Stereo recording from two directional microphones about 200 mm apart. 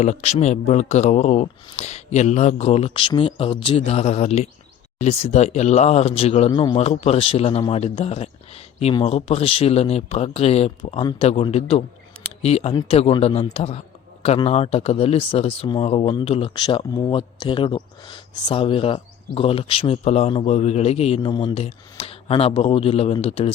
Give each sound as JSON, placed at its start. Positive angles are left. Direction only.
{"t": 0.0, "sound": "a man's voice", "side_deg": 35}